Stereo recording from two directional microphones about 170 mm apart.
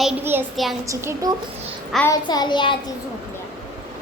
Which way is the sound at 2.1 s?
25° left (ahead or behind).